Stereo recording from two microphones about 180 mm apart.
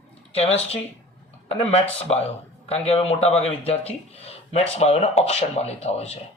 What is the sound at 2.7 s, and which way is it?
Speech, 35° left (ahead or behind).